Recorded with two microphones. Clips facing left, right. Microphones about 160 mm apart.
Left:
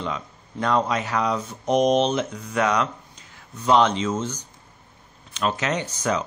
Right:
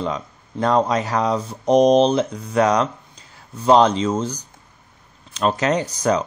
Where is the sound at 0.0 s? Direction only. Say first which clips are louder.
Right 5 dB; 35° right (ahead or behind).